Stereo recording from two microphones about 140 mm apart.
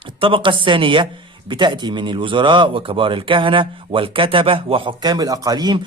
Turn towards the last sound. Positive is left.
turn(degrees=-30)  # may be behind; listen again after turning